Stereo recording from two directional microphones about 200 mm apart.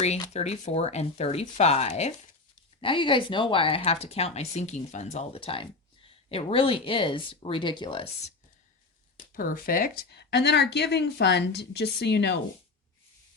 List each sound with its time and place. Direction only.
0.0 s speech: 35° left (ahead or behind)
9.1 s speech: 45° left (ahead or behind)